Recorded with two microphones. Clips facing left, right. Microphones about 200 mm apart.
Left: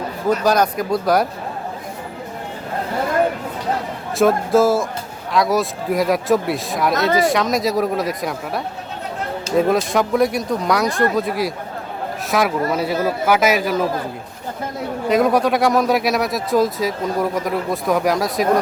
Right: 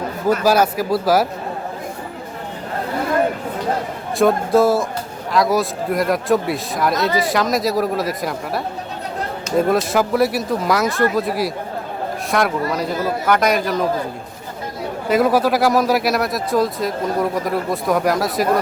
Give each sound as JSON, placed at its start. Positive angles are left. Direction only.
{"t": 0.3, "sound": "speech", "side_deg": -5}
{"t": 4.2, "sound": "speech", "side_deg": 0}
{"t": 15.1, "sound": "speech", "side_deg": -5}